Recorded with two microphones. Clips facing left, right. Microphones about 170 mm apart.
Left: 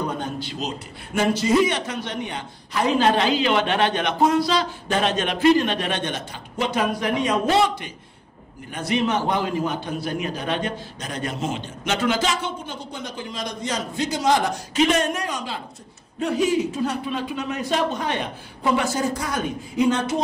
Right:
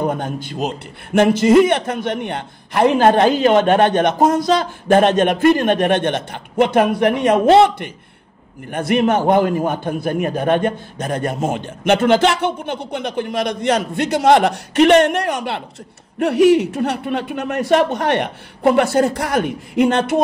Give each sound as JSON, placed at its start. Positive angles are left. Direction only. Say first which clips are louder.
{"t": 0.0, "sound": "a man's voice", "louder": "right 6 dB", "side_deg": -50}